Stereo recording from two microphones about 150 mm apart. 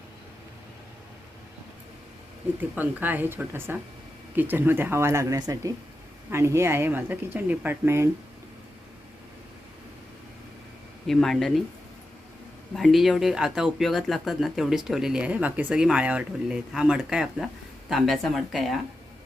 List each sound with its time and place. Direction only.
2.7 s speech: 10° right (ahead or behind)
11.0 s speech: centre (ahead or behind)
12.7 s speech: centre (ahead or behind)